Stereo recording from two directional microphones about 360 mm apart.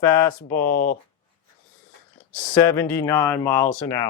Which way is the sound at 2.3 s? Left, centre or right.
Centre.